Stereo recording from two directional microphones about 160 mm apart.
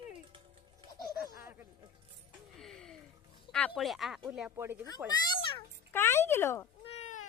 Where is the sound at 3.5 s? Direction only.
5° left (ahead or behind).